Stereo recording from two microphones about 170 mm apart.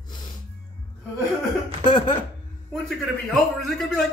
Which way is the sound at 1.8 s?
25° left (ahead or behind).